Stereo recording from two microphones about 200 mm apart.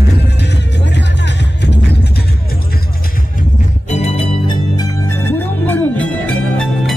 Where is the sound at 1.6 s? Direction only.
60° left (ahead or behind).